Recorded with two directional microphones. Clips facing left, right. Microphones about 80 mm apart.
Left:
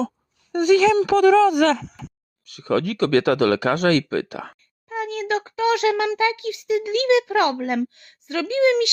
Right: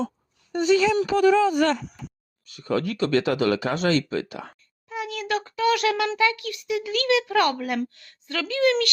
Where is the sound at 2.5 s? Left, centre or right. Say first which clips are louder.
Left 4 dB; left.